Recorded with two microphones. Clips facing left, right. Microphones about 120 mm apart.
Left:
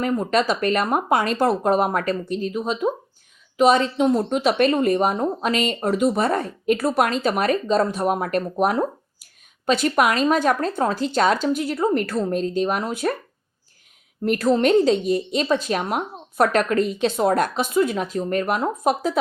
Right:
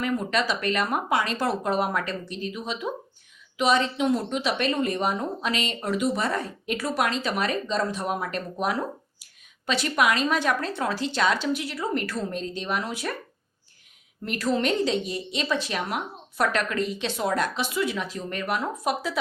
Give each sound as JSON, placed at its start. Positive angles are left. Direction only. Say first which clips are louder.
{"t": 0.0, "sound": "a woman's voice", "louder": "left 5 dB", "side_deg": 45}
{"t": 14.3, "sound": "a woman's voice", "louder": "left 7 dB", "side_deg": 45}